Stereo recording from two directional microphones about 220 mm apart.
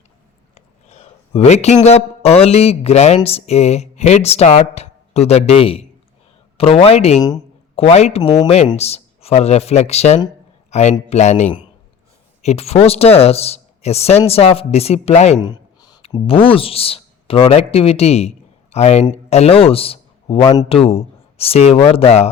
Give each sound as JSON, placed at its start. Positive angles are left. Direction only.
{"t": 0.5, "sound": "a man's voice", "side_deg": 30}